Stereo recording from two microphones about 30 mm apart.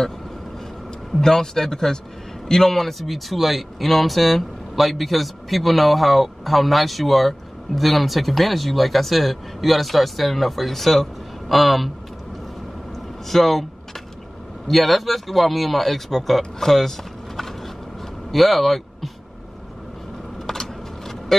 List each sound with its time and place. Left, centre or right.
1.2 s a man's voice: centre
13.3 s speech: centre
14.7 s speech: centre
21.3 s speech: centre